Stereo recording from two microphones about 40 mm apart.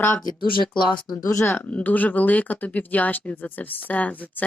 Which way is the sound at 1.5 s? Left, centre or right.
Left.